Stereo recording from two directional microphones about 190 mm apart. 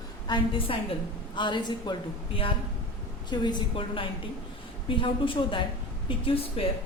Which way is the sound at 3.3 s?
25° left (ahead or behind).